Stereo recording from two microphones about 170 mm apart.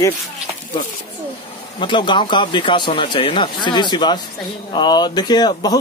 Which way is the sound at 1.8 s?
30° left (ahead or behind).